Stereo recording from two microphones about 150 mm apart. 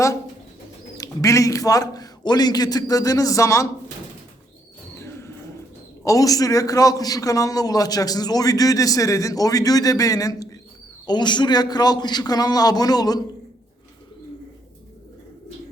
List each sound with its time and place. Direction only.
0.9 s a man's voice: 25° left (ahead or behind)
6.1 s a man's voice: 25° left (ahead or behind)